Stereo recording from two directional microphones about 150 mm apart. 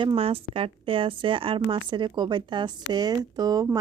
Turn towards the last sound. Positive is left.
turn(degrees=-25)  # may be behind; listen again after turning